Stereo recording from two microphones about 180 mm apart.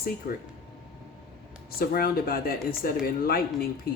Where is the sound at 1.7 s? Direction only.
55° left (ahead or behind).